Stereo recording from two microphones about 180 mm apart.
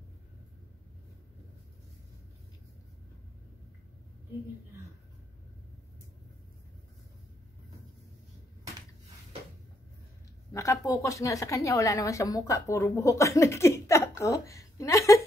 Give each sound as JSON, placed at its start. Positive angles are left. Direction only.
{"t": 10.5, "sound": "a woman's voice", "side_deg": 15}